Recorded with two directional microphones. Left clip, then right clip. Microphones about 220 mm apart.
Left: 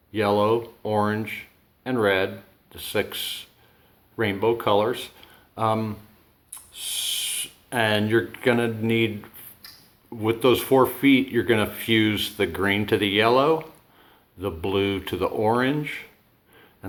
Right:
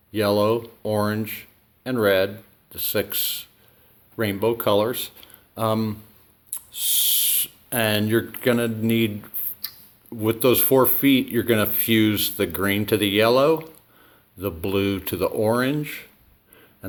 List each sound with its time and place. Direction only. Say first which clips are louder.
0.1 s speech: right 1 dB; 35° right (ahead or behind)